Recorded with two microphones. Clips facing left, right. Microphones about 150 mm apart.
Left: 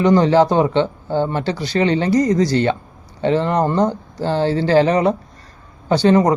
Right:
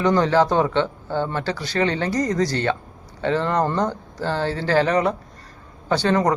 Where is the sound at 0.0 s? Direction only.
20° left (ahead or behind).